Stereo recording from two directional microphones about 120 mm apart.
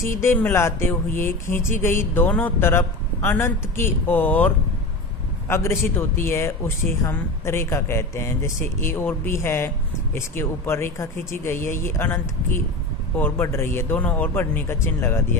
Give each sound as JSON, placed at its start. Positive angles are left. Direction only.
{"t": 0.2, "sound": "a man's voice", "side_deg": 20}